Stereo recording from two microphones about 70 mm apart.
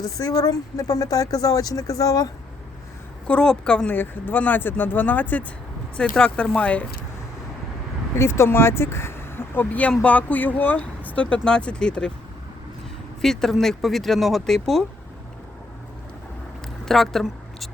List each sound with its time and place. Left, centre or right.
0.0 s speech: left
3.2 s speech: centre
3.8 s speech: left
6.0 s speech: centre
8.1 s speech: left
10.0 s speech: left
13.2 s speech: centre
16.8 s speech: centre